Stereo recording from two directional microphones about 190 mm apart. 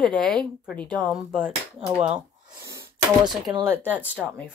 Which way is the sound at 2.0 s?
15° right (ahead or behind).